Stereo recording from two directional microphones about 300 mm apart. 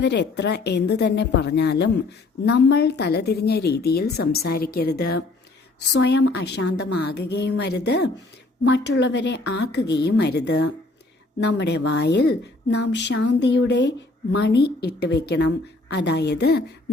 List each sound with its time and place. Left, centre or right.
0.0 s a woman's voice: left